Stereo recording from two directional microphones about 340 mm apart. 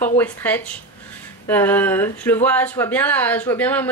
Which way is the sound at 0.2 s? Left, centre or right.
Centre.